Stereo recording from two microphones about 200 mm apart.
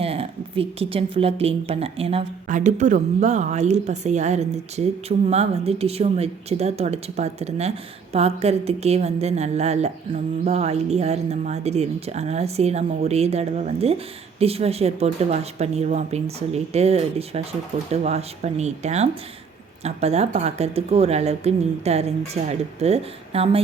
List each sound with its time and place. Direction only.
0.0 s a woman's voice: 30° right (ahead or behind)